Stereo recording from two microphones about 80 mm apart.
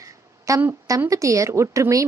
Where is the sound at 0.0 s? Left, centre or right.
Right.